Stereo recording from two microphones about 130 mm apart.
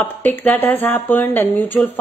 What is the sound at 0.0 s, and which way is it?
Speech, 15° left (ahead or behind).